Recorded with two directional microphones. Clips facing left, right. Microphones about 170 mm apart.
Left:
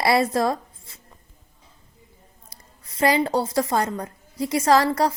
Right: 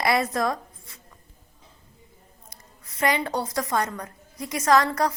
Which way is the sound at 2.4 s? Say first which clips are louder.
Right 1 dB; 30° left (ahead or behind).